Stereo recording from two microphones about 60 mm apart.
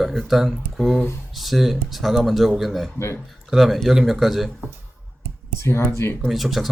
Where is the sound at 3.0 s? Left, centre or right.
Left.